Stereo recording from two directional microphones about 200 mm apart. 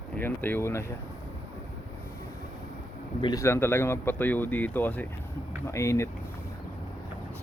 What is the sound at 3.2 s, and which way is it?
Speech, 20° left (ahead or behind).